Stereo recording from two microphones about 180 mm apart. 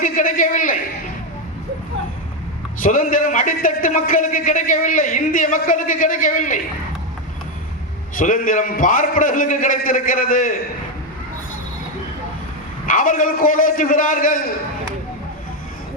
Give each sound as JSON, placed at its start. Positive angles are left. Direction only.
{"t": 0.0, "sound": "speech", "side_deg": 50}
{"t": 2.8, "sound": "speech", "side_deg": 45}
{"t": 8.1, "sound": "speech", "side_deg": 45}
{"t": 12.8, "sound": "speech", "side_deg": 50}